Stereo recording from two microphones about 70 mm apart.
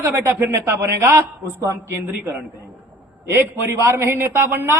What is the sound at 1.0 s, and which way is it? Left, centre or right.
Speech, right.